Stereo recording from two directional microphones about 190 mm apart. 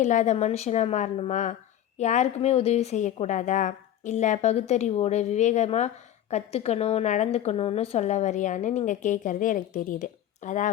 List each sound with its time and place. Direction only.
0.0 s a woman's voice: 40° left (ahead or behind)